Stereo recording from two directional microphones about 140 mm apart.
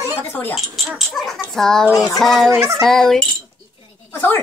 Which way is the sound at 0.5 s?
Centre (ahead or behind).